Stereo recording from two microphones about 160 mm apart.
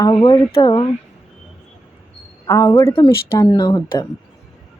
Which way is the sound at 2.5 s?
20° left (ahead or behind).